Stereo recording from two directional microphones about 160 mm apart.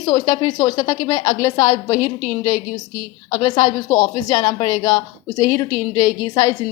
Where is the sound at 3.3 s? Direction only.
25° left (ahead or behind).